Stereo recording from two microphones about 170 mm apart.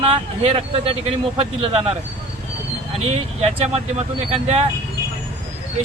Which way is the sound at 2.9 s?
40° right (ahead or behind).